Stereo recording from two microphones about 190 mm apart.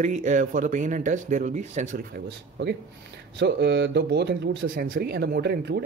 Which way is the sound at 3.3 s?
65° right (ahead or behind).